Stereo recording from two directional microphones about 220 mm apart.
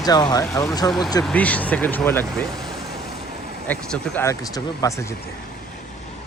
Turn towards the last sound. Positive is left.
turn(degrees=15)  # may be behind; listen again after turning